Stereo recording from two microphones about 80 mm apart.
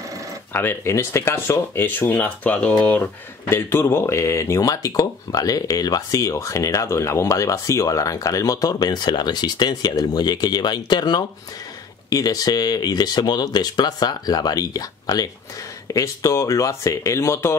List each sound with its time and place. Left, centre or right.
0.5 s speech: left